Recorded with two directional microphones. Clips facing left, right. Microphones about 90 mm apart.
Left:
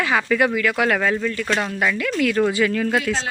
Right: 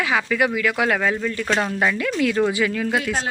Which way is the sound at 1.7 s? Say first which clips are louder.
Even; 25° right (ahead or behind).